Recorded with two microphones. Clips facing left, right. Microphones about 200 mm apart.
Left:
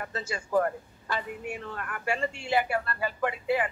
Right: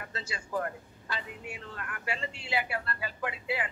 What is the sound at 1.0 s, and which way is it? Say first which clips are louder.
Speech: left 6 dB; 50° left (ahead or behind).